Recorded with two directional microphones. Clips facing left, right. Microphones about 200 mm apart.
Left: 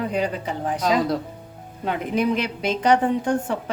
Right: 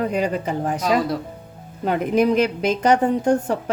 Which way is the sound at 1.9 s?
45° right (ahead or behind).